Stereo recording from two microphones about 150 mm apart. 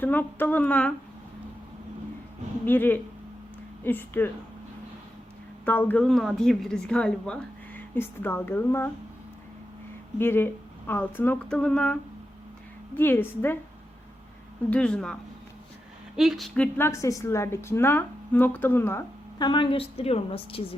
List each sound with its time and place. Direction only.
0.0 s speech: 10° left (ahead or behind)
2.6 s speech: 15° left (ahead or behind)
5.6 s speech: 10° left (ahead or behind)
10.2 s speech: 15° left (ahead or behind)
13.0 s speech: 15° left (ahead or behind)
14.7 s speech: 5° left (ahead or behind)
16.6 s speech: 15° left (ahead or behind)
19.4 s a woman's voice: 35° left (ahead or behind)